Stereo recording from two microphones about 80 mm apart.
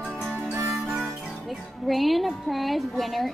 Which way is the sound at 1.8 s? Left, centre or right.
Centre.